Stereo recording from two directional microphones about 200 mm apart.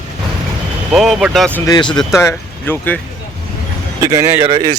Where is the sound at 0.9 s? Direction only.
Centre (ahead or behind).